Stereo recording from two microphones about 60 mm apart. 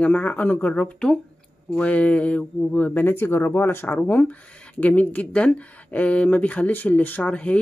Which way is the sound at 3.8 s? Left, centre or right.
Left.